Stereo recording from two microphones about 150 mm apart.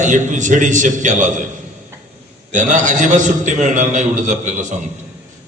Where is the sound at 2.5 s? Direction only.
55° right (ahead or behind).